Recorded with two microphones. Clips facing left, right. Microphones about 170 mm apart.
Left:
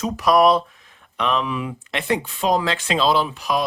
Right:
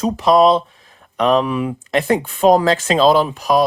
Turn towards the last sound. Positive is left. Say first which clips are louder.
# right 6 dB
turn(degrees=-40)  # may be behind; listen again after turning